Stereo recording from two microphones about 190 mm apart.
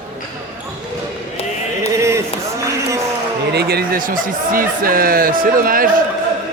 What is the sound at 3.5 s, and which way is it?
A man's voice, 55° right (ahead or behind).